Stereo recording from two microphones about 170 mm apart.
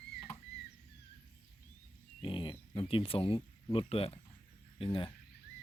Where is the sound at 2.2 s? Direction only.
30° left (ahead or behind).